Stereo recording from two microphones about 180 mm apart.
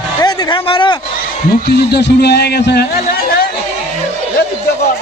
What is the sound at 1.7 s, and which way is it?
A man's voice, 65° left (ahead or behind).